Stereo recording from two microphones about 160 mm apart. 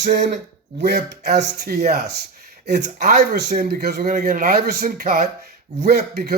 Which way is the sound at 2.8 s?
70° right (ahead or behind).